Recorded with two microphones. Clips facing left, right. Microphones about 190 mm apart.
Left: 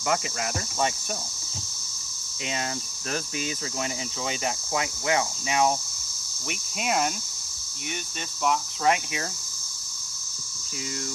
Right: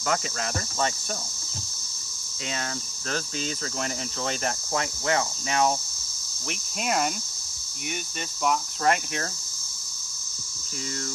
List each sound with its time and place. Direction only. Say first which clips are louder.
0.1 s speech: left 1 dB; 5° left (ahead or behind)
3.1 s speech: even; 10° left (ahead or behind)
8.4 s speech: even; 5° left (ahead or behind)